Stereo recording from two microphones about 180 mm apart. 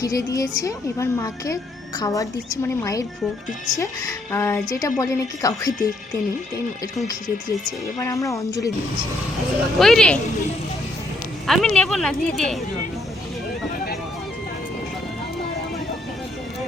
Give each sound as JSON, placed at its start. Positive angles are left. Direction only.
{"t": 0.0, "sound": "a woman's voice", "side_deg": 20}
{"t": 7.9, "sound": "speech", "side_deg": 15}
{"t": 9.7, "sound": "speech", "side_deg": 0}
{"t": 11.4, "sound": "speech", "side_deg": 0}